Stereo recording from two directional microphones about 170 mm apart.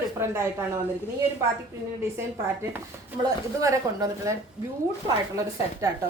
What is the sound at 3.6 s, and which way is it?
Speech, 20° right (ahead or behind).